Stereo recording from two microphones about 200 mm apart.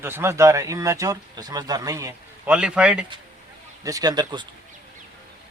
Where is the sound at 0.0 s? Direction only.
10° right (ahead or behind).